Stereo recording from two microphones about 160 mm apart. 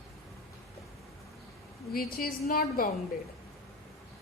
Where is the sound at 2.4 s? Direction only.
65° left (ahead or behind).